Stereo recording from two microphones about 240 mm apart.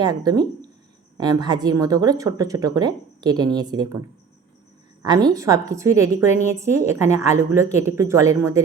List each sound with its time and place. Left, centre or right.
0.0 s a woman's voice: centre
5.0 s a woman's voice: centre